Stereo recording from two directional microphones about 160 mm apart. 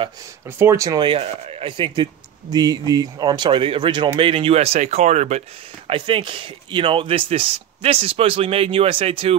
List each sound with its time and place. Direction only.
0.5 s speech: 15° right (ahead or behind)
1.0 s speech: 35° right (ahead or behind)
5.9 s speech: 35° right (ahead or behind)